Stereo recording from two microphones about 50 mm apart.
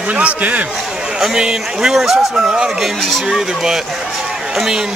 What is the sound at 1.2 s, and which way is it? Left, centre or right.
Speech, centre.